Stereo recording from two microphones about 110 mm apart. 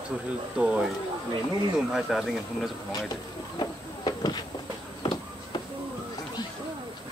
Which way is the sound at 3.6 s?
40° left (ahead or behind).